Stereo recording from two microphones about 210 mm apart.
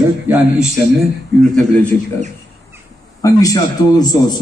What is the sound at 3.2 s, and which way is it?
Speech, 15° left (ahead or behind).